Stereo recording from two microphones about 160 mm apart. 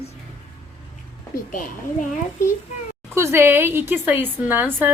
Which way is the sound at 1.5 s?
55° left (ahead or behind).